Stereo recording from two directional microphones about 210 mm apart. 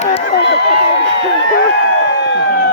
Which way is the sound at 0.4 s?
55° left (ahead or behind).